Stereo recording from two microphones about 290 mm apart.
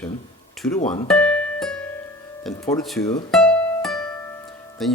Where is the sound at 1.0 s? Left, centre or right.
Centre.